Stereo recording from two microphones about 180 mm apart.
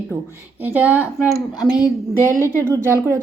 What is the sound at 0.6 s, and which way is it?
Speech, 10° right (ahead or behind).